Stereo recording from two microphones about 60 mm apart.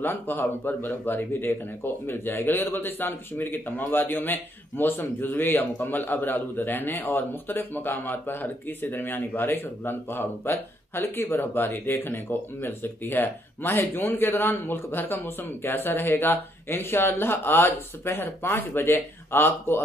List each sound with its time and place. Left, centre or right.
0.0 s speech: left